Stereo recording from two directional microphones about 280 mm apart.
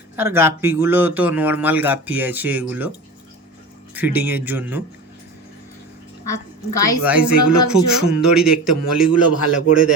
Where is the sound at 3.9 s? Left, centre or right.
Centre.